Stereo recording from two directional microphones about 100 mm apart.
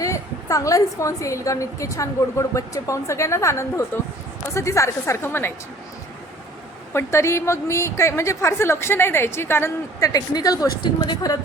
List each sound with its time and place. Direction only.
0.0 s a woman's voice: 35° left (ahead or behind)
6.9 s a woman's voice: 30° left (ahead or behind)
10.1 s a woman's voice: 40° left (ahead or behind)